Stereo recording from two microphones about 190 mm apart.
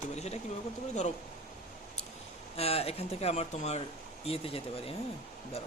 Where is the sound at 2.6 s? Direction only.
30° left (ahead or behind).